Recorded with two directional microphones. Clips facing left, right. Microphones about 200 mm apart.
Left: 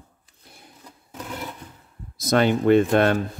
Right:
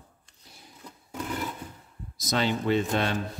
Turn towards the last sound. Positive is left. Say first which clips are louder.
# left 9 dB
turn(degrees=55)  # may be behind; listen again after turning